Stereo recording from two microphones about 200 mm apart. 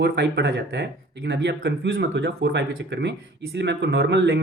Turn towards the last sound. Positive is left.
turn(degrees=-60)  # may be behind; listen again after turning